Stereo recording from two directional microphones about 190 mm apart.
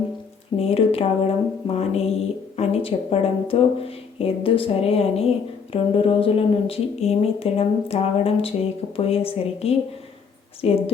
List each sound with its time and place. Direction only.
0.6 s speech: 30° left (ahead or behind)